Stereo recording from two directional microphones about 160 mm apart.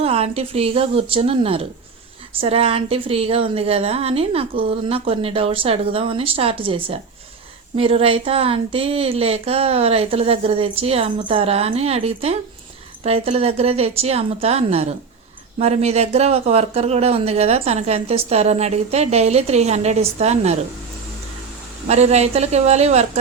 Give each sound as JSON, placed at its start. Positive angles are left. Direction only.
{"t": 0.0, "sound": "speech", "side_deg": -40}
{"t": 21.8, "sound": "speech", "side_deg": -45}